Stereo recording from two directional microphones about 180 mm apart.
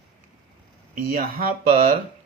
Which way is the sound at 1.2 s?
55° right (ahead or behind).